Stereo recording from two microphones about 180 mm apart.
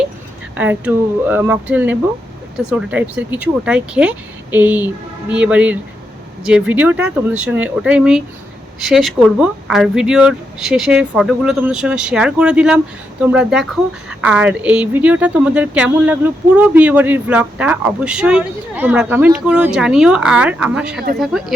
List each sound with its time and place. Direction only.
0.5 s speech: 10° right (ahead or behind)